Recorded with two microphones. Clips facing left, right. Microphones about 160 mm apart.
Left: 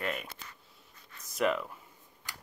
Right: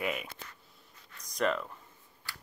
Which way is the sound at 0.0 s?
5° right (ahead or behind).